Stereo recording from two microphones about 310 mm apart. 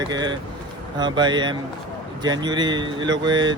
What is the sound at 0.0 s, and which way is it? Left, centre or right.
Speech, centre.